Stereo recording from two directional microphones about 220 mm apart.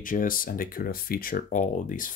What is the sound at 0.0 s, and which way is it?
Speech, 40° left (ahead or behind).